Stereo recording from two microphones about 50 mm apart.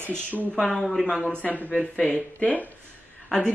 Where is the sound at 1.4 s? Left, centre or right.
Left.